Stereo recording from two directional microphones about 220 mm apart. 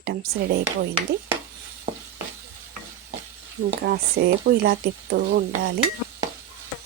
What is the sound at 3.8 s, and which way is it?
Speech, 50° right (ahead or behind).